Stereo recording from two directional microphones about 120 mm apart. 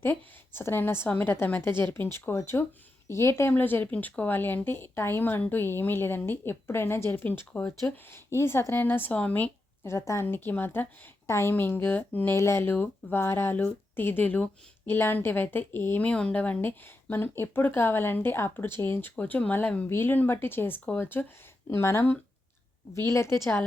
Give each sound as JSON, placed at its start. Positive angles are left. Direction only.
{"t": 0.0, "sound": "speech", "side_deg": 20}